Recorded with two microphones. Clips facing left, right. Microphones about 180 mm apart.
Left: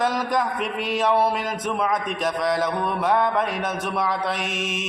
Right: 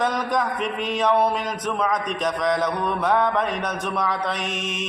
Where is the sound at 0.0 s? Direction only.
5° left (ahead or behind).